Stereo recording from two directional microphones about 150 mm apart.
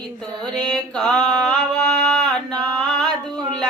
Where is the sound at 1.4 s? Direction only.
5° left (ahead or behind).